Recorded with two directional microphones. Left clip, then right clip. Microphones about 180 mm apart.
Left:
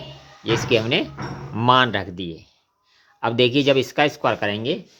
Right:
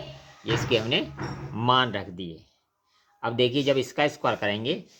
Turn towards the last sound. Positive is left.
turn(degrees=20)  # may be behind; listen again after turning